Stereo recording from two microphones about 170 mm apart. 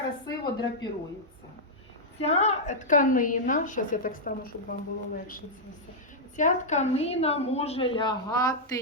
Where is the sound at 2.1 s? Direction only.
40° left (ahead or behind); by 4.4 s 55° left (ahead or behind).